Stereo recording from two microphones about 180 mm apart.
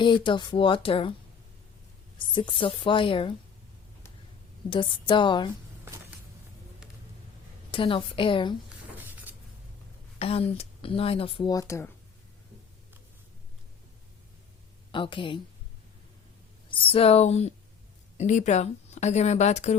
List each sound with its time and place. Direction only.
0.0 s speech: 25° left (ahead or behind)
2.1 s speech: 25° left (ahead or behind)
4.7 s speech: 25° left (ahead or behind)
5.8 s music: 15° right (ahead or behind)
7.7 s speech: 30° left (ahead or behind)
10.2 s speech: 35° left (ahead or behind)
11.5 s speech: 15° left (ahead or behind)
14.9 s speech: 30° left (ahead or behind)
16.6 s speech: 30° left (ahead or behind)